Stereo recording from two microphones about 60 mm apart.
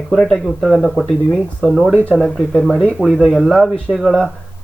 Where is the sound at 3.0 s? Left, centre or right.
Centre.